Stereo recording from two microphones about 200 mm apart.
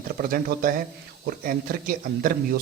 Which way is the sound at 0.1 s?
45° right (ahead or behind).